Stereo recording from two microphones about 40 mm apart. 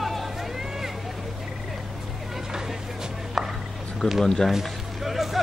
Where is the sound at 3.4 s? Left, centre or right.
Centre.